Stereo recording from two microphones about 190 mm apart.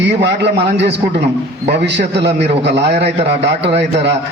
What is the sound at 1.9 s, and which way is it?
Speech, 65° right (ahead or behind).